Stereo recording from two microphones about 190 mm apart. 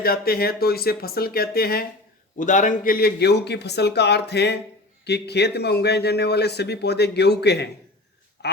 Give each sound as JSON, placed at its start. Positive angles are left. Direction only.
{"t": 0.0, "sound": "speech", "side_deg": 55}
{"t": 2.4, "sound": "speech", "side_deg": 40}
{"t": 8.4, "sound": "a sound", "side_deg": 60}